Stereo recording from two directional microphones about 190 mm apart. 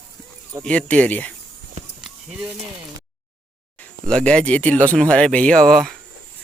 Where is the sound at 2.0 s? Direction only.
5° right (ahead or behind).